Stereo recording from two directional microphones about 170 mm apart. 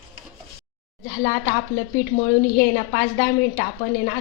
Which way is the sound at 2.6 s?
45° left (ahead or behind).